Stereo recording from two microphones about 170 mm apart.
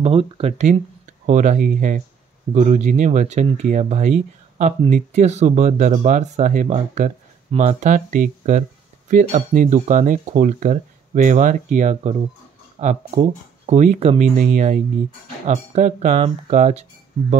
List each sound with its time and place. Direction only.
0.0 s speech: 35° right (ahead or behind)